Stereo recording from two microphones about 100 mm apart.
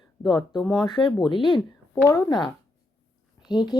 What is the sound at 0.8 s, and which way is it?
Speech, 50° left (ahead or behind).